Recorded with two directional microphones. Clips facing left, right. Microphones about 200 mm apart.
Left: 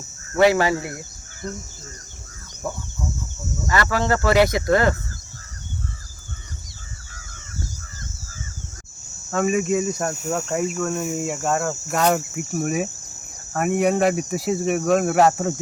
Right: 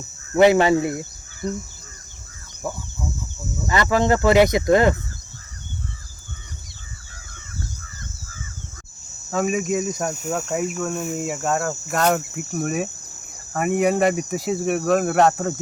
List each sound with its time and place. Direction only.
0.3 s speech: 20° right (ahead or behind)
2.6 s speech: 5° right (ahead or behind)
3.7 s speech: 20° right (ahead or behind)
9.3 s speech: centre (ahead or behind)
10.2 s speech: 5° right (ahead or behind)